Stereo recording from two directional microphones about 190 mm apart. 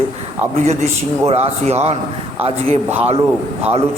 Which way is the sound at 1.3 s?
35° right (ahead or behind).